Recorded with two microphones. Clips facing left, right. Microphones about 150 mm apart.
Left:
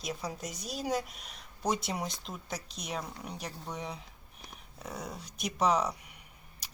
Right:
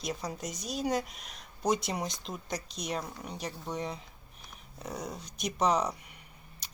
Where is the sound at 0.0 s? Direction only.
5° left (ahead or behind).